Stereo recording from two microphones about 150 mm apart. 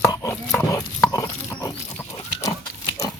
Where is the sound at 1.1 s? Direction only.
25° left (ahead or behind).